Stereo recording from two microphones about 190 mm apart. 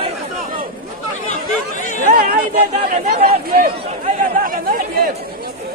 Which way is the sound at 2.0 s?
50° right (ahead or behind).